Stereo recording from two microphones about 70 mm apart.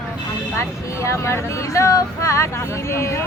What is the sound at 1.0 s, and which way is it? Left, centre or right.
Speech, left.